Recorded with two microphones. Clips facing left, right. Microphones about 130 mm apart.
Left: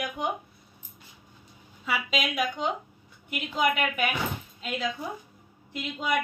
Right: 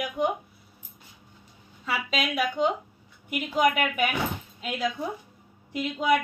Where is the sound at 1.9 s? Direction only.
Centre (ahead or behind).